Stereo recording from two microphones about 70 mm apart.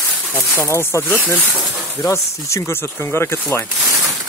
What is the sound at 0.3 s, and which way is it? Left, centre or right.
Speech, left.